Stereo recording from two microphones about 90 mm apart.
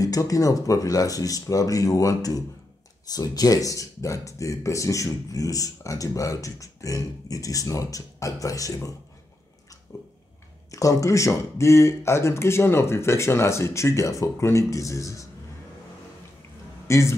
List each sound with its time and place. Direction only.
0.0 s speech: 40° left (ahead or behind)
9.9 s a sound: 40° left (ahead or behind)
10.7 s speech: 40° left (ahead or behind)
16.8 s a man's voice: 35° left (ahead or behind)